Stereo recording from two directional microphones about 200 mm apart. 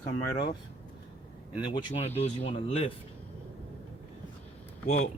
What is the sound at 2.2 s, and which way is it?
Speech, 30° left (ahead or behind).